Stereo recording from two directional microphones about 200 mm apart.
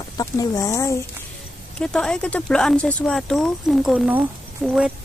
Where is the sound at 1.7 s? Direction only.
5° left (ahead or behind).